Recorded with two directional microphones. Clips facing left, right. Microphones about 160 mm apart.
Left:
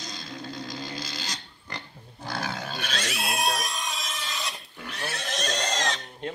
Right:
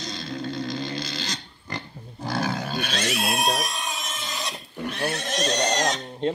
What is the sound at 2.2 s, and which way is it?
Roaring cats, 40° right (ahead or behind).